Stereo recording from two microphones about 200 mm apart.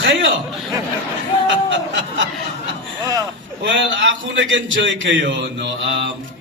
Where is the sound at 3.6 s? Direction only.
65° right (ahead or behind).